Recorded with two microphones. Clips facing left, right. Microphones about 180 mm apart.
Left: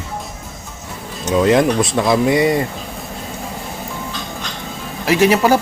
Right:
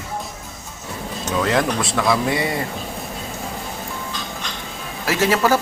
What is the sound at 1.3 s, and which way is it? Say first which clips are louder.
Speech: left 7 dB; 20° left (ahead or behind).